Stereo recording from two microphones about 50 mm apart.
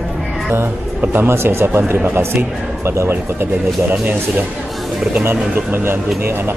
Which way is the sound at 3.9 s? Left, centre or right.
Right.